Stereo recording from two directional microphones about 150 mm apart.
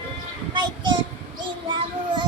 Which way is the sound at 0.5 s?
30° right (ahead or behind).